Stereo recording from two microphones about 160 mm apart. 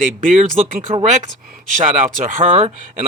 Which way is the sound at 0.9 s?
45° right (ahead or behind).